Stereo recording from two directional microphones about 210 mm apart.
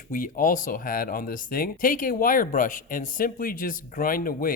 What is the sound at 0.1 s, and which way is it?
Speech, 40° left (ahead or behind).